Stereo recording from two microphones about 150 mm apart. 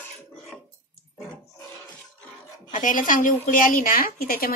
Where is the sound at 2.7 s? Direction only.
60° left (ahead or behind).